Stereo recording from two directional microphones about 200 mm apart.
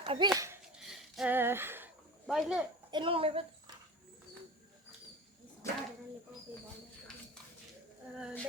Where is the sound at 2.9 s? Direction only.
25° right (ahead or behind).